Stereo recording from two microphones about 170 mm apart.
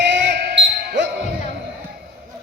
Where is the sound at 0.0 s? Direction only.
85° right.